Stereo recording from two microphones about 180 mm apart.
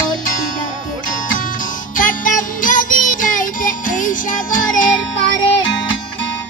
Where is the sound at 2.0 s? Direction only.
50° left (ahead or behind).